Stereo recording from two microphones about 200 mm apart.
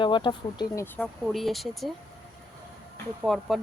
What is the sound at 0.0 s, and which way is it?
Speech, 25° left (ahead or behind).